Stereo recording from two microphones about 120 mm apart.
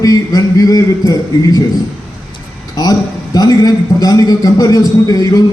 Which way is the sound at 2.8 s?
30° left (ahead or behind).